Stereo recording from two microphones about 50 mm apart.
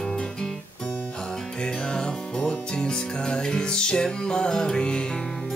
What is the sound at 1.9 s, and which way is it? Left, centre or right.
Music, centre.